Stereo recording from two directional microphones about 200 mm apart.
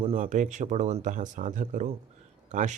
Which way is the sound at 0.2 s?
40° right (ahead or behind).